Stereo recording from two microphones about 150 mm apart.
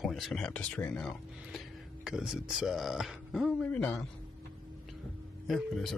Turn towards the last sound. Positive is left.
turn(degrees=0)  # may be behind; listen again after turning